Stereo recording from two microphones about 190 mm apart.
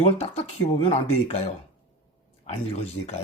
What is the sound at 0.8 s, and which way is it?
Speech, 35° left (ahead or behind).